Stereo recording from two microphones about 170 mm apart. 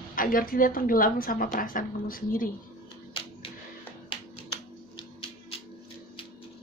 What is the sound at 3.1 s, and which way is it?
Music, 30° left (ahead or behind).